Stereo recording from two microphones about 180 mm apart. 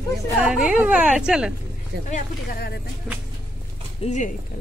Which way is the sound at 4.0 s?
40° left (ahead or behind).